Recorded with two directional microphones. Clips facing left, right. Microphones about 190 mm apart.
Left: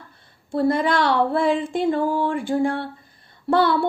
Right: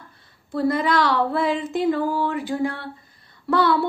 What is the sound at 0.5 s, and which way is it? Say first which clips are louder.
Child singing: left 1 dB; 25° left (ahead or behind).